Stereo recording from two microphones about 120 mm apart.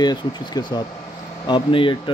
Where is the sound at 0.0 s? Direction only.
35° left (ahead or behind).